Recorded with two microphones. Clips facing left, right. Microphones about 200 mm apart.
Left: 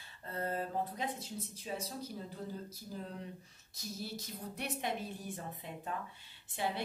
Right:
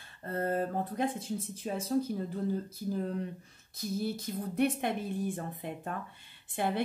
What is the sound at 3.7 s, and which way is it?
Speech, 55° right (ahead or behind).